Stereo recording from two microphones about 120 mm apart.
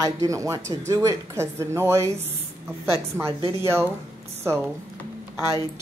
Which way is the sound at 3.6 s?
20° right (ahead or behind).